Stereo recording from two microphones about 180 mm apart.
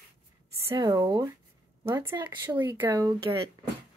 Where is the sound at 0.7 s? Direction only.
20° right (ahead or behind).